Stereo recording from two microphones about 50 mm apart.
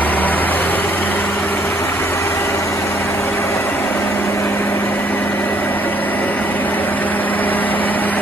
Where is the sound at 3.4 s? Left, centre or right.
Left.